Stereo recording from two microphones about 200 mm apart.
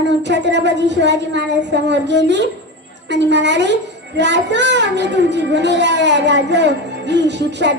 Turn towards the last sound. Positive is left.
turn(degrees=-60)  # may be behind; listen again after turning